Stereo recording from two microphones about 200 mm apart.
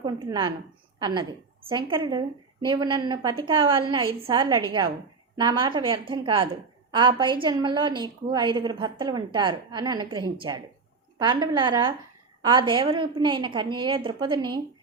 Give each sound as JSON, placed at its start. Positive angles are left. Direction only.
{"t": 0.0, "sound": "a woman's voice", "side_deg": -20}
{"t": 11.5, "sound": "a woman's voice", "side_deg": -25}